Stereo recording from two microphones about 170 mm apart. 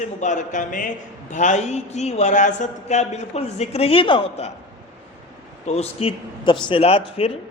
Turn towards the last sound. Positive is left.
turn(degrees=35)  # may be behind; listen again after turning